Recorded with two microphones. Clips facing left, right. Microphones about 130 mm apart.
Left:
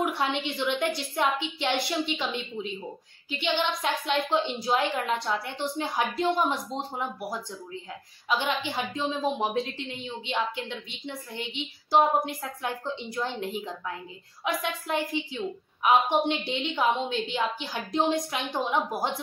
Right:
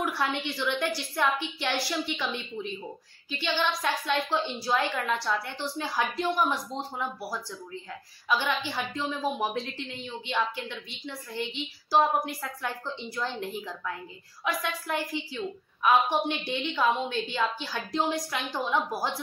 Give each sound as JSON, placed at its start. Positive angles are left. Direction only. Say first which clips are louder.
{"t": 0.0, "sound": "a woman's voice", "louder": "left 2 dB", "side_deg": 20}